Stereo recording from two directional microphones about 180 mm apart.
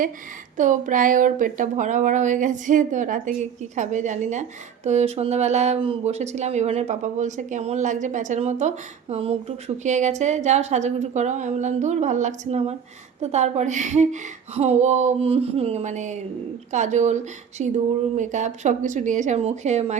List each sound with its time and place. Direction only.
0.5 s speech: 45° right (ahead or behind)